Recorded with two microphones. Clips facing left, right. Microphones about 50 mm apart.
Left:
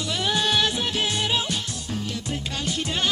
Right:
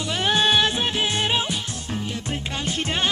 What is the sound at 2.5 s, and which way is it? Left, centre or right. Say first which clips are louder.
Music: right 2 dB; right.